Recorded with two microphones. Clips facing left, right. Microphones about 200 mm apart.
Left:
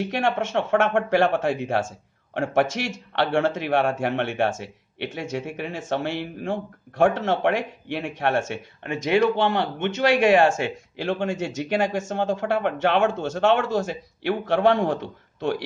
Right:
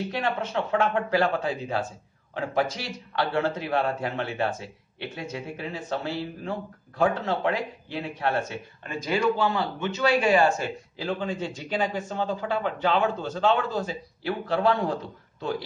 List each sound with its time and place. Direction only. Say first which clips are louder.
0.0 s speech: left 4 dB; 80° left